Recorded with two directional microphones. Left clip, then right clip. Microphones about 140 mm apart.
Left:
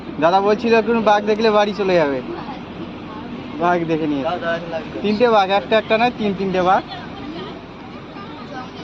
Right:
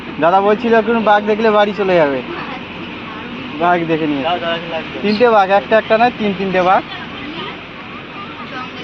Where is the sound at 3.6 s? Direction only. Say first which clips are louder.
Right 4 dB; 40° right (ahead or behind).